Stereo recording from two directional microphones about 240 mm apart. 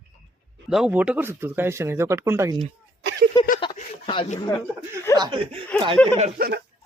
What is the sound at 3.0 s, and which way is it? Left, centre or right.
Speech, right.